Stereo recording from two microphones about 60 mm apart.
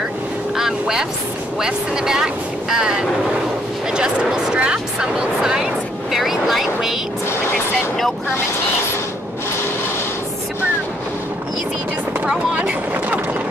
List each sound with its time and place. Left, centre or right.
0.6 s quack: centre
1.6 s speech: centre
12.3 s speech: centre